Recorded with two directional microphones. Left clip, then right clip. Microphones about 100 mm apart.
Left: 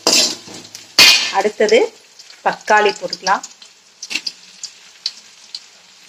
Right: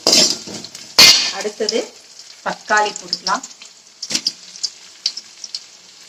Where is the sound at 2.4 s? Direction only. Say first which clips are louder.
Left 4 dB; 35° left (ahead or behind).